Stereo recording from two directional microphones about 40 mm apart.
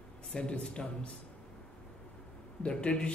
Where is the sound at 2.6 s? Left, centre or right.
Left.